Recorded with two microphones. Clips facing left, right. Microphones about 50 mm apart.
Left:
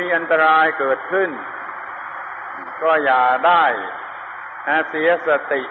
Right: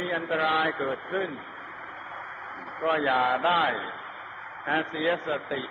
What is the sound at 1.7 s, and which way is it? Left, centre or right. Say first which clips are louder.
Radio: left 10 dB; left.